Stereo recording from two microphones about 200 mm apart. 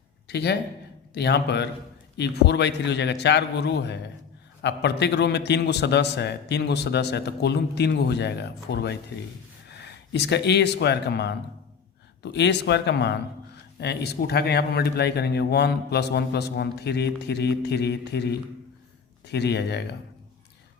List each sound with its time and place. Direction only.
0.3 s a man's voice: 55° left (ahead or behind)